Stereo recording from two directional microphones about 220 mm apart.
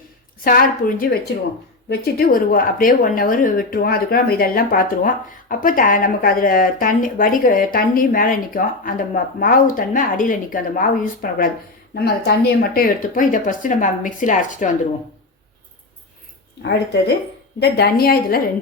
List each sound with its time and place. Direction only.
0.4 s speech: 40° left (ahead or behind)
17.6 s a woman's voice: 45° left (ahead or behind)